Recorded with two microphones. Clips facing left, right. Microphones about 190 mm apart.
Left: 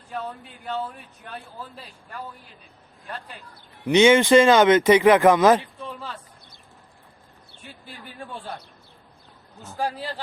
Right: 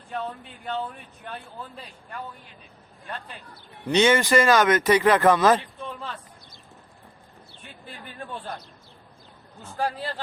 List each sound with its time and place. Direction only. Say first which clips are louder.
0.1 s speech: right 1 dB; 5° left (ahead or behind)
3.8 s speech: left 4 dB; 20° left (ahead or behind)
8.0 s a man's voice: even; 10° left (ahead or behind)
9.7 s a man's voice: even; 10° left (ahead or behind)